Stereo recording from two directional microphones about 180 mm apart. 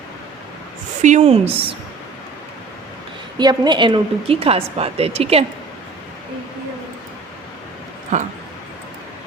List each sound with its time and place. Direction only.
1.0 s a woman's voice: 40° right (ahead or behind)
3.3 s a woman's voice: 25° right (ahead or behind)
8.1 s a woman's voice: 40° right (ahead or behind)